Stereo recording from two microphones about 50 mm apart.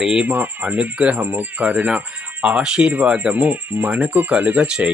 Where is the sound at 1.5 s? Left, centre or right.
Right.